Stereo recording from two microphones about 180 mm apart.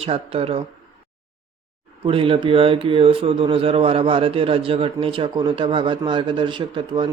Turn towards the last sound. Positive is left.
turn(degrees=-25)  # may be behind; listen again after turning